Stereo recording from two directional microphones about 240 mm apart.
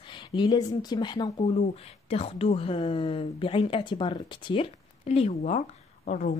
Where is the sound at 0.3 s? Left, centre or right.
Centre.